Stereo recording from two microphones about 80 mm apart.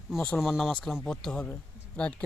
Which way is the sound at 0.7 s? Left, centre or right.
Centre.